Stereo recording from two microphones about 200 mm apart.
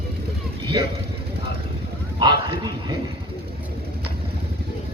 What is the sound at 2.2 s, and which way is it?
Bow-wow, 20° right (ahead or behind).